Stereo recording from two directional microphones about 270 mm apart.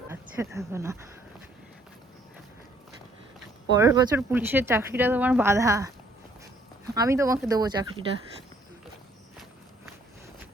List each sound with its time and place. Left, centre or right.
0.1 s speech: centre
3.8 s speech: centre
6.9 s speech: centre